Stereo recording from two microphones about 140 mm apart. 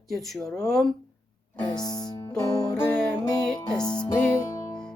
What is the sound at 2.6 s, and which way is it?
Music, 15° left (ahead or behind).